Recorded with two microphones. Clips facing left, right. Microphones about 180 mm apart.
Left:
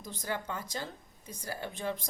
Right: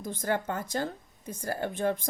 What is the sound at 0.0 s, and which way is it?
Speech, 50° right (ahead or behind).